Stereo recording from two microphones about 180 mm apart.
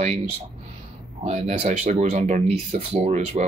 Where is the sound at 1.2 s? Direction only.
40° right (ahead or behind).